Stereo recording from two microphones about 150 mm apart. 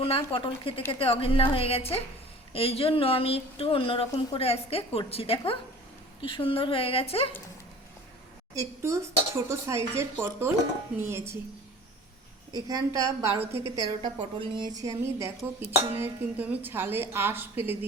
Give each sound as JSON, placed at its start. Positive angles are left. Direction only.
{"t": 0.0, "sound": "speech", "side_deg": 40}
{"t": 8.5, "sound": "speech", "side_deg": -20}
{"t": 12.5, "sound": "a woman's voice", "side_deg": -25}